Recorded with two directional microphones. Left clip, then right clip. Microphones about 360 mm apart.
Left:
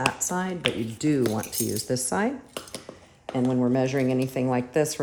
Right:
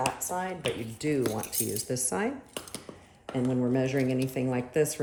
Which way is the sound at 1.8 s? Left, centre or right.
Left.